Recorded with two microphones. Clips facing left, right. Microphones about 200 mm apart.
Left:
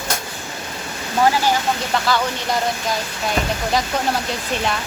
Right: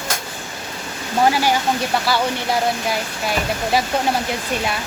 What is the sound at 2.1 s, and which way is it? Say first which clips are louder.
Speech: left 1 dB; 5° right (ahead or behind).